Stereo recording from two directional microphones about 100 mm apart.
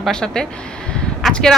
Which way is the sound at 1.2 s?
Centre (ahead or behind).